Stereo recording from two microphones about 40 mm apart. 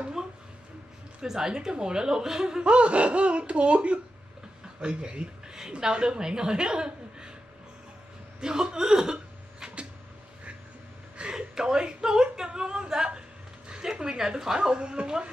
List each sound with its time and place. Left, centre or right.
0.2 s a sound: centre
1.2 s a woman's voice: centre
8.4 s chuckle: centre
11.1 s whimper: centre
13.7 s speech: centre